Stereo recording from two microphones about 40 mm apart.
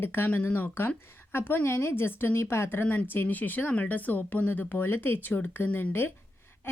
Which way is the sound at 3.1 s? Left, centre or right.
Left.